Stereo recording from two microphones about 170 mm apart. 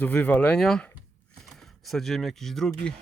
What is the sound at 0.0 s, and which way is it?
Speech, 10° left (ahead or behind).